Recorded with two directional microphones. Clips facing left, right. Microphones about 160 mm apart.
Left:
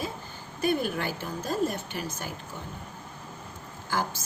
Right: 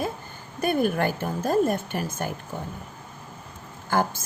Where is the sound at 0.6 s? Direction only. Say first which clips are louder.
Right 4 dB; 50° right (ahead or behind).